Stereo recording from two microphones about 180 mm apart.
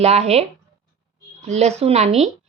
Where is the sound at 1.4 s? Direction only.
40° right (ahead or behind).